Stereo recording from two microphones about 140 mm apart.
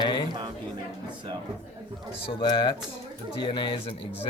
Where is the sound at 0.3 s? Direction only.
35° right (ahead or behind).